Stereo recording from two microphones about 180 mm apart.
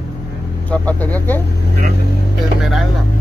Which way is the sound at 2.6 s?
Centre (ahead or behind).